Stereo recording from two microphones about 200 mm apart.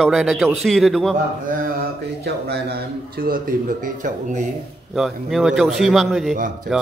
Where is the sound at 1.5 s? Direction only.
45° right (ahead or behind).